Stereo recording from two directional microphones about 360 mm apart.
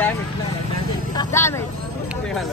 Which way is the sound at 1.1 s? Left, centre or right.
Centre.